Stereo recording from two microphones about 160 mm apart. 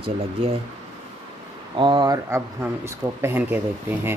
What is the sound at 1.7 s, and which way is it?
Speech, 30° right (ahead or behind).